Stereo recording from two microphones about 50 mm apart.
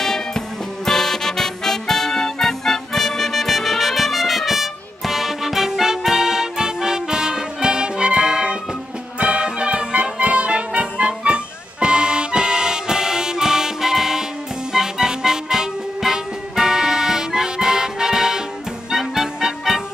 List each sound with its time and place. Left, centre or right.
0.0 s music: centre